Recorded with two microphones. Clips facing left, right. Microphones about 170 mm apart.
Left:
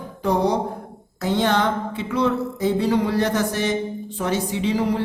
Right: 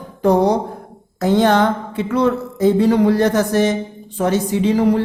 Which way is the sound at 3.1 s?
45° right (ahead or behind).